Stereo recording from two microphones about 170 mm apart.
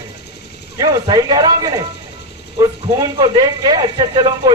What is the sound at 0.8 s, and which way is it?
Speech, 25° right (ahead or behind).